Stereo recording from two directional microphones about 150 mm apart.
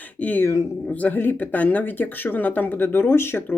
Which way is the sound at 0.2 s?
10° left (ahead or behind).